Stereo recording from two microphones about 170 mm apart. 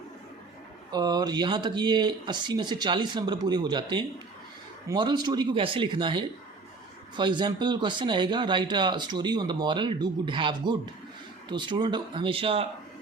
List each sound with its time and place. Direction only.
0.9 s speech: 25° right (ahead or behind)